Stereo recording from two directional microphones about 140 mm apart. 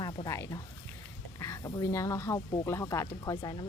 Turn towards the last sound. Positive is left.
turn(degrees=30)  # may be behind; listen again after turning